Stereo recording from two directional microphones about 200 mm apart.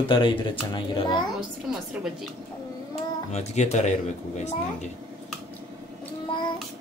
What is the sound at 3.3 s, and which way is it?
Speech, 35° left (ahead or behind).